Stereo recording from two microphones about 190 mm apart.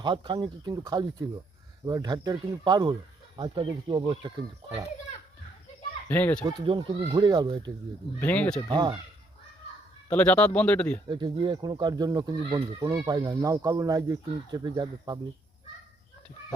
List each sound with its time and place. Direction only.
0.0 s speech: 25° right (ahead or behind)
6.1 s speech: 10° left (ahead or behind)
6.4 s speech: 25° right (ahead or behind)
8.2 s speech: 10° left (ahead or behind)
8.7 s speech: 25° right (ahead or behind)
10.1 s speech: 5° left (ahead or behind)
11.1 s speech: 25° right (ahead or behind)